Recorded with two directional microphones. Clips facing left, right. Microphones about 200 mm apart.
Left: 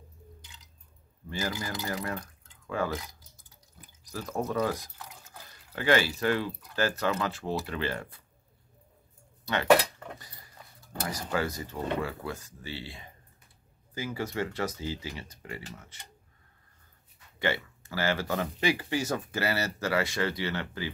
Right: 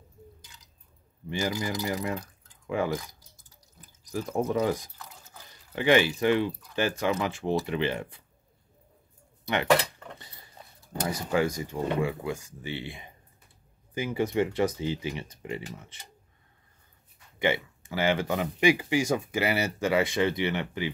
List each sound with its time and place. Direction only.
1.3 s speech: 15° right (ahead or behind)
4.1 s speech: 15° right (ahead or behind)
5.8 s speech: 20° right (ahead or behind)
10.1 s speech: 25° right (ahead or behind)
17.4 s speech: 15° right (ahead or behind)